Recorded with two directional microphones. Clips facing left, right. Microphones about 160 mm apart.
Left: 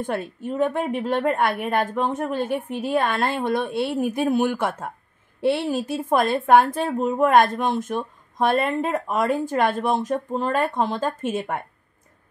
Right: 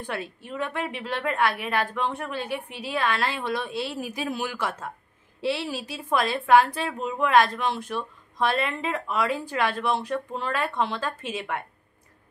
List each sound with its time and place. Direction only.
0.0 s a woman's voice: 45° left (ahead or behind)